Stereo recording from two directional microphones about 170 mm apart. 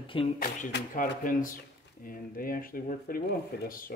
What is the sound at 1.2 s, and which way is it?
Speech, 55° left (ahead or behind).